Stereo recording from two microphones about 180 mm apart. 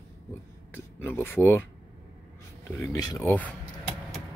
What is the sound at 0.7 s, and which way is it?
Speech, 10° left (ahead or behind).